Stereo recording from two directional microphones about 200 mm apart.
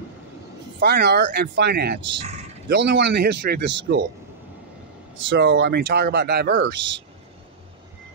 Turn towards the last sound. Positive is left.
turn(degrees=-60)  # may be behind; listen again after turning